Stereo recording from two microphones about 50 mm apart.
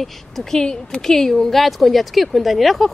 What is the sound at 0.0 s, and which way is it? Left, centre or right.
Speech, centre.